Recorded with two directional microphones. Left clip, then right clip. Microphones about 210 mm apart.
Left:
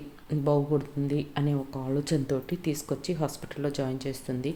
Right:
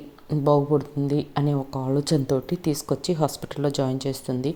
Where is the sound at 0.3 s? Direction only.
25° right (ahead or behind).